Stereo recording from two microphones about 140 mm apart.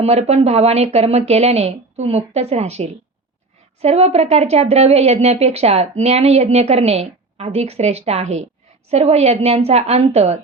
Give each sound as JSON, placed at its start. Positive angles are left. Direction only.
{"t": 0.0, "sound": "a woman's voice", "side_deg": -50}